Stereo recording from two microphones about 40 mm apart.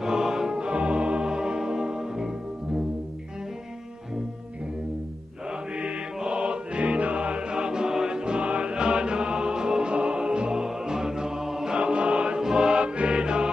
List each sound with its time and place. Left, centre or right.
0.0 s music: centre
5.5 s mantra: right
6.2 s music: right
11.7 s music: right